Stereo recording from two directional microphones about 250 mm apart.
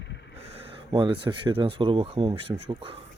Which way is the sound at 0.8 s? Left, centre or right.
Centre.